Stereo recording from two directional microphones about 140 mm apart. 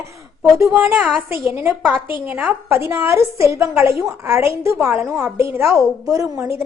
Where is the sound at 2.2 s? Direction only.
10° right (ahead or behind).